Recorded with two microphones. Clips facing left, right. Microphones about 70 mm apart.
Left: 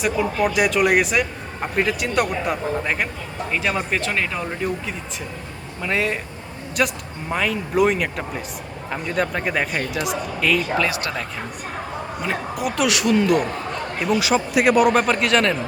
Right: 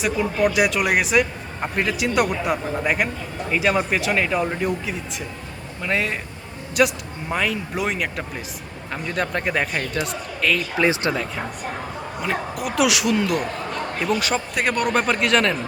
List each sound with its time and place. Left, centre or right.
0.0 s speech: centre
10.8 s speech: right
12.2 s speech: centre